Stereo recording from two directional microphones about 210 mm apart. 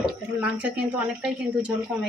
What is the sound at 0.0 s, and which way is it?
A woman's voice, 5° right (ahead or behind).